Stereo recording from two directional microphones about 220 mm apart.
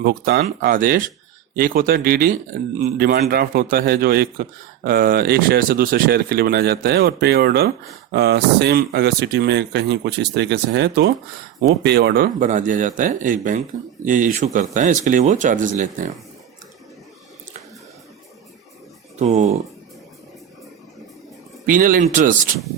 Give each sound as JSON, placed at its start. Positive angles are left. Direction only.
{"t": 0.0, "sound": "a man's voice", "side_deg": -45}
{"t": 19.2, "sound": "speech", "side_deg": -30}
{"t": 21.7, "sound": "speech", "side_deg": -40}